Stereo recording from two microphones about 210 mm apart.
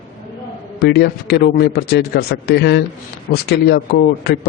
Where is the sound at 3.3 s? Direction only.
45° left (ahead or behind).